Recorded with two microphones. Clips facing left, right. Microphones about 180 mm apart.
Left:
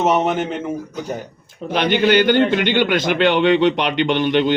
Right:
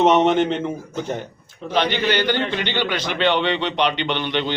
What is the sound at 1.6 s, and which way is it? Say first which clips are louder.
A man's voice: left 4 dB; 55° left (ahead or behind).